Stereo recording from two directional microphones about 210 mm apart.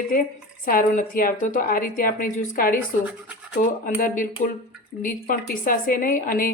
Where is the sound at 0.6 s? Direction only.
40° left (ahead or behind).